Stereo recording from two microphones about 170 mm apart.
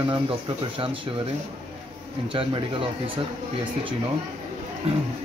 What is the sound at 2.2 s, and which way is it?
Speech, 30° right (ahead or behind).